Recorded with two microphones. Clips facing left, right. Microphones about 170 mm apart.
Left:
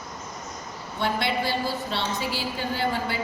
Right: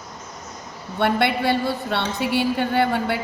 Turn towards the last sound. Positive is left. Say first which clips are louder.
# right 6 dB
turn(degrees=-60)  # may be behind; listen again after turning